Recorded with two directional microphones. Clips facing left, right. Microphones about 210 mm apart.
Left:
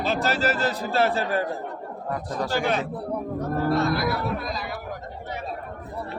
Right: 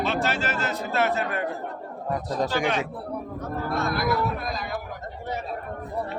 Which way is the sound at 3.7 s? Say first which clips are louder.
Left 1 dB; 50° right (ahead or behind).